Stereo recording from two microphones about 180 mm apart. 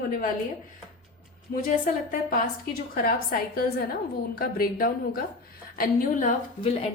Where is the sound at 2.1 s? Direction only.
50° left (ahead or behind).